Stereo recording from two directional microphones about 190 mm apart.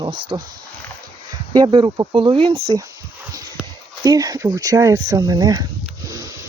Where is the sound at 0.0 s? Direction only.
25° right (ahead or behind).